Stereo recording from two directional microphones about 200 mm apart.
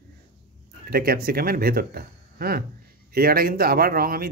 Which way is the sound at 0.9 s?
50° right (ahead or behind).